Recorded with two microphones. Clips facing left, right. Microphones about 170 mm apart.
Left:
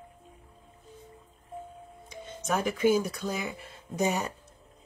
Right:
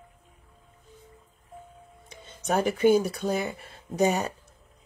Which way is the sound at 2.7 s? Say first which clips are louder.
Right 4 dB; 60° right (ahead or behind).